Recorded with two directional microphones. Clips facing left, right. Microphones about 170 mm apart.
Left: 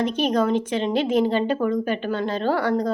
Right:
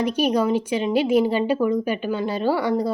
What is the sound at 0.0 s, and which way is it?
A woman's voice, 10° right (ahead or behind).